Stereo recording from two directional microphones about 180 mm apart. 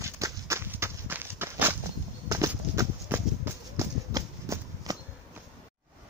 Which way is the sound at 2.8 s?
10° right (ahead or behind).